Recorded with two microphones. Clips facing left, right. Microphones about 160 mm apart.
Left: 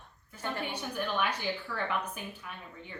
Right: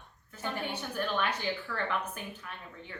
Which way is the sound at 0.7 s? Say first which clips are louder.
Right 1 dB; 10° left (ahead or behind).